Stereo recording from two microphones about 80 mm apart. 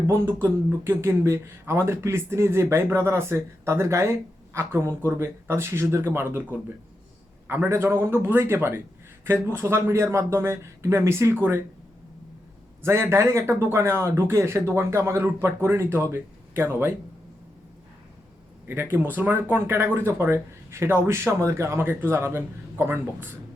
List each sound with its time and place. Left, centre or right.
0.1 s speech: right
7.7 s speech: right
12.8 s speech: right
18.7 s speech: right